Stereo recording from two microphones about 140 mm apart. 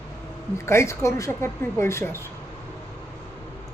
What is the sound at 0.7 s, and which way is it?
Speech, 20° left (ahead or behind).